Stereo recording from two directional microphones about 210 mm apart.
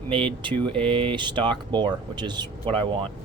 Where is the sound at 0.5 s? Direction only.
5° left (ahead or behind).